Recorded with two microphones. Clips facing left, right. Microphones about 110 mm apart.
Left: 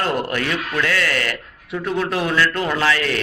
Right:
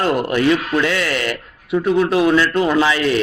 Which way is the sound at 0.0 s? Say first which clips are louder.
Right 5 dB; 15° right (ahead or behind).